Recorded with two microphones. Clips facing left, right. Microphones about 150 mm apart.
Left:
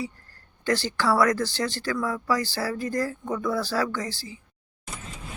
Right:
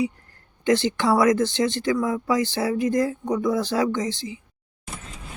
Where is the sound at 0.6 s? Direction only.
20° right (ahead or behind).